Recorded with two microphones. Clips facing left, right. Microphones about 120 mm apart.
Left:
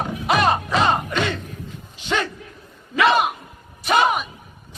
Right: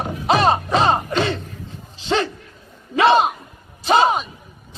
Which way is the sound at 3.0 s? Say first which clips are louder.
Right 3 dB; 30° right (ahead or behind).